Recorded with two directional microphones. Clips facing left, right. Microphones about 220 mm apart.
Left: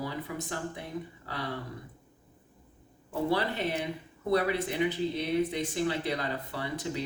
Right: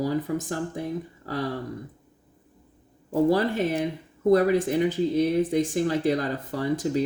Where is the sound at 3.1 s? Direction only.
45° right (ahead or behind).